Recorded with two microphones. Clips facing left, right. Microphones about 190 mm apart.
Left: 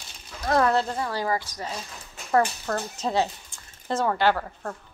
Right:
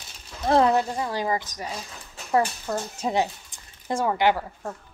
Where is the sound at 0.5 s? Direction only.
25° right (ahead or behind).